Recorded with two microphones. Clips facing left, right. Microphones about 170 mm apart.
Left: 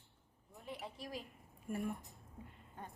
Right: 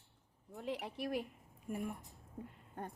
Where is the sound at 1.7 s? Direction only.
15° right (ahead or behind).